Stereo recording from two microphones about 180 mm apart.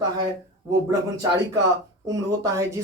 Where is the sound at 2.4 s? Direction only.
15° right (ahead or behind).